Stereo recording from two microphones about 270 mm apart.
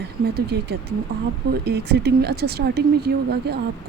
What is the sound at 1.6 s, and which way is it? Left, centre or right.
Speech, right.